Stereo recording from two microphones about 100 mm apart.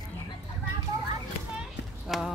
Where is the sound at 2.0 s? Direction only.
Centre (ahead or behind).